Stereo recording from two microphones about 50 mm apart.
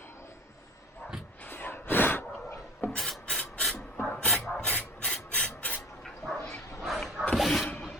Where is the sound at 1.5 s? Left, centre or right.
Left.